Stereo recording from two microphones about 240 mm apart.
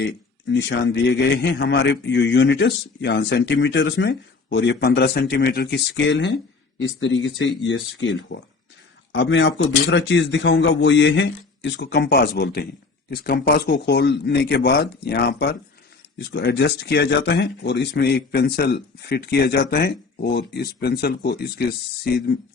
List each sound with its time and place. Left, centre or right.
0.0 s a man's voice: left